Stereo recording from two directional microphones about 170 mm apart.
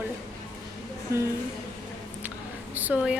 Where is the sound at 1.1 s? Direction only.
15° right (ahead or behind).